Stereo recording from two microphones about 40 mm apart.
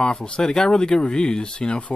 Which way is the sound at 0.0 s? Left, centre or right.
Left.